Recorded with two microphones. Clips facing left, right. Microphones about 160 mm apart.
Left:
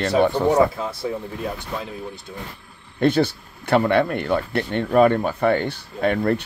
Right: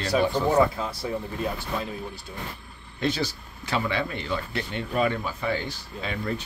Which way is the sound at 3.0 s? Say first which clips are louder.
Left 9 dB; 55° left (ahead or behind).